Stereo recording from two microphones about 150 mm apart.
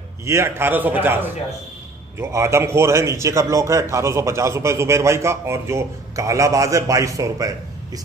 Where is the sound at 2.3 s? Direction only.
20° right (ahead or behind).